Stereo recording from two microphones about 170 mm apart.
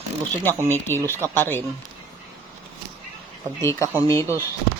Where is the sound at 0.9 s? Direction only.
15° left (ahead or behind).